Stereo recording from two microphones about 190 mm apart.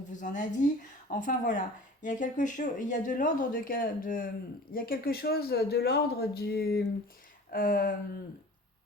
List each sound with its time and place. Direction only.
0.1 s a woman's voice: 40° left (ahead or behind)